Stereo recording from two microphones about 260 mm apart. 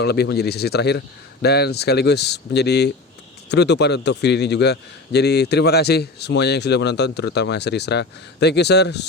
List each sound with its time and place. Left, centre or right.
0.0 s a man's voice: left